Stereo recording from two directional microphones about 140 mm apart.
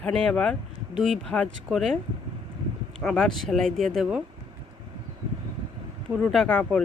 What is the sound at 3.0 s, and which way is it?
Speech, 5° left (ahead or behind).